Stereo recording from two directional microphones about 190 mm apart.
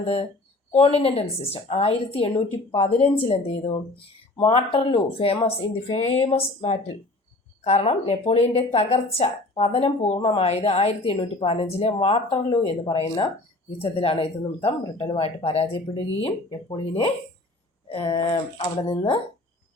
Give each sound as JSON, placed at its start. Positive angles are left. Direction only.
{"t": 0.0, "sound": "speech", "side_deg": 30}